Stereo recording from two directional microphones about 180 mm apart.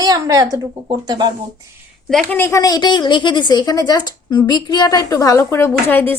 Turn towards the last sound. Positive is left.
turn(degrees=10)  # may be behind; listen again after turning